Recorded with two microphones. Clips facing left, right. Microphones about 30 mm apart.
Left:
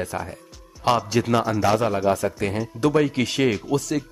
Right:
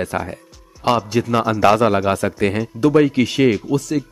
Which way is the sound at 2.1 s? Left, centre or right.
Right.